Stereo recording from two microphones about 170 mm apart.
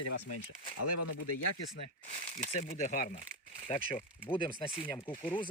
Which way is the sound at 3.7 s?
30° left (ahead or behind).